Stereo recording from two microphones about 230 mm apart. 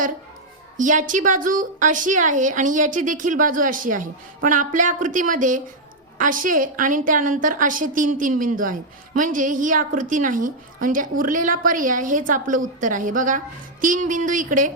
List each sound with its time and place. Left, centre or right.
0.8 s a woman's voice: right